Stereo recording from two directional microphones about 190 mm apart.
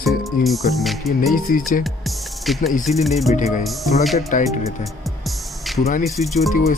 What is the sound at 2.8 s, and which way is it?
Speech, centre (ahead or behind).